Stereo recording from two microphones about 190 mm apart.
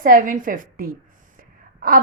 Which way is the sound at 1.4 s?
50° right (ahead or behind).